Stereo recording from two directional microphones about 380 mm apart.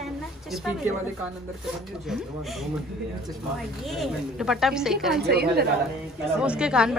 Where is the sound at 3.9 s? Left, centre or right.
Centre.